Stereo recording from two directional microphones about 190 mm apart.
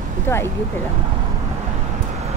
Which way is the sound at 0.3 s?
15° left (ahead or behind).